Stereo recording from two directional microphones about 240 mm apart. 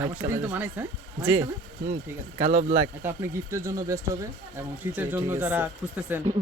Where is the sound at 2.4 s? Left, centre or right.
Right.